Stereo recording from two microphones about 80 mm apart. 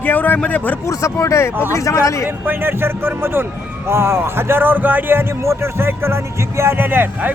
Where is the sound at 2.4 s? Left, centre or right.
Right.